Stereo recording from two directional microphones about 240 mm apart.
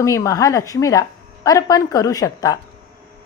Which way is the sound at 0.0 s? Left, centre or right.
Centre.